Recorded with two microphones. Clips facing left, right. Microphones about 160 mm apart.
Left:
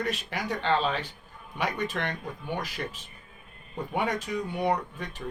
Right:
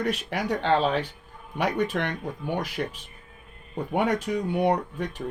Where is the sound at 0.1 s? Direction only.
60° right (ahead or behind).